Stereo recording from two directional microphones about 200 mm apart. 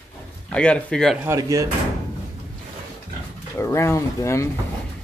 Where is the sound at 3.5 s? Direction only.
15° left (ahead or behind).